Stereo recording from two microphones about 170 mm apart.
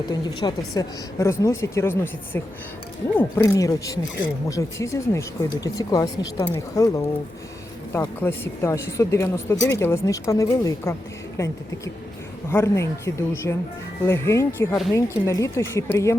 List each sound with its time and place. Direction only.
0.0 s speech: 25° left (ahead or behind)
8.2 s speech: 15° left (ahead or behind)
12.5 s speech: 15° left (ahead or behind)